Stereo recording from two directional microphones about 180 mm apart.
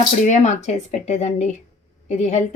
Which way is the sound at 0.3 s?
40° left (ahead or behind).